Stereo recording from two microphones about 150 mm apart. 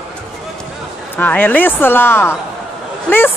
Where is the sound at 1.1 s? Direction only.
10° left (ahead or behind).